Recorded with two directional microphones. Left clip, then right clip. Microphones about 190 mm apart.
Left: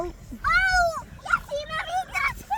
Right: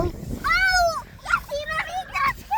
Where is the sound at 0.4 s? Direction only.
25° right (ahead or behind).